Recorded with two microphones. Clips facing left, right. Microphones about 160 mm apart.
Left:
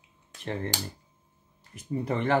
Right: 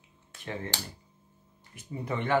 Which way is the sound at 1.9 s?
40° left (ahead or behind).